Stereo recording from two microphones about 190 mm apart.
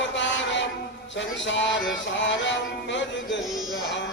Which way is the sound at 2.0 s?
70° left (ahead or behind).